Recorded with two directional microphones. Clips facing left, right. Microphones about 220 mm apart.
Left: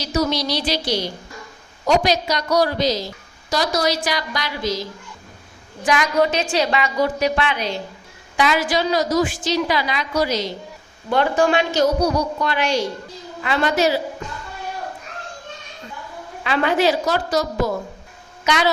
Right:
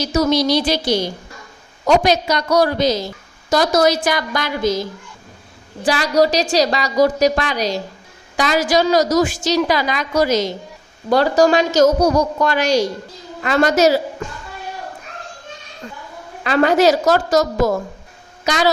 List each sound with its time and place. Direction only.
0.1 s a woman's voice: 50° right (ahead or behind)
2.0 s a woman's voice: 55° right (ahead or behind)
5.8 s a woman's voice: 35° right (ahead or behind)
16.4 s a woman's voice: 40° right (ahead or behind)